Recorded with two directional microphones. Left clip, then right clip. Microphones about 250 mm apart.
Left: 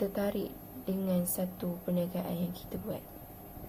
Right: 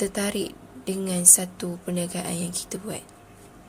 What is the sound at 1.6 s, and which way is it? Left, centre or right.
Speech, right.